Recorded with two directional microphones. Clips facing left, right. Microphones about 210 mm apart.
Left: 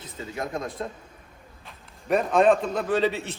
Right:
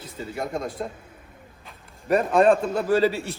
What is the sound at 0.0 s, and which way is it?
A man's voice, 5° right (ahead or behind).